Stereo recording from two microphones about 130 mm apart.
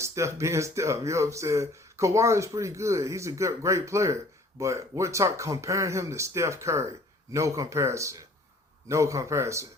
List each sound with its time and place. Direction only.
0.0 s speech: 20° right (ahead or behind)